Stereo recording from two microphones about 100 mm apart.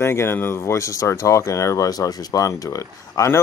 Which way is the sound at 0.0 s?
25° left (ahead or behind).